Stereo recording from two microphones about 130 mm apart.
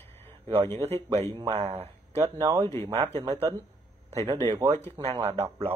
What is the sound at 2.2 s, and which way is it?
Speech, 25° right (ahead or behind).